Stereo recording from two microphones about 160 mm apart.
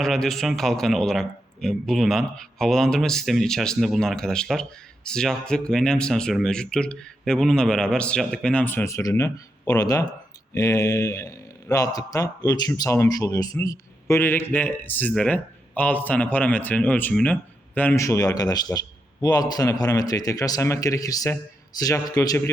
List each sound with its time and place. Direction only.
0.0 s a man's voice: centre (ahead or behind); by 22.5 s 20° left (ahead or behind)